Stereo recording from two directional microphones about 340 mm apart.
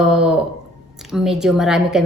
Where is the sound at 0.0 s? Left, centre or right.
Centre.